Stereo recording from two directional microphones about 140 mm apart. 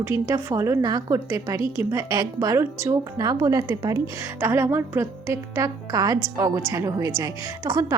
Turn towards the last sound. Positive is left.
turn(degrees=-25)  # may be behind; listen again after turning